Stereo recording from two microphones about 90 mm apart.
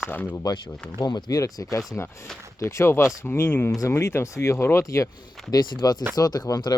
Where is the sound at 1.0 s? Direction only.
50° left (ahead or behind); by 5.1 s 35° left (ahead or behind).